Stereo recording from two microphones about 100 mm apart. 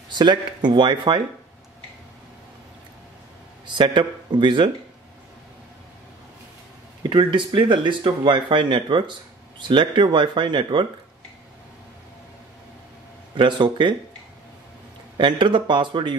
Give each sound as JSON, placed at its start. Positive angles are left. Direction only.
{"t": 0.1, "sound": "speech", "side_deg": -50}
{"t": 3.6, "sound": "a man's voice", "side_deg": -55}
{"t": 7.0, "sound": "speech", "side_deg": -55}
{"t": 13.3, "sound": "speech", "side_deg": -50}
{"t": 15.1, "sound": "speech", "side_deg": -55}